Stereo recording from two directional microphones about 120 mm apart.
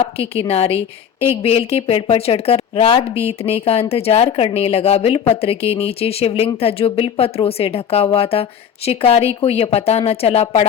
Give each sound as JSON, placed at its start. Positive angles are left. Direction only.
{"t": 0.0, "sound": "a woman's voice", "side_deg": 55}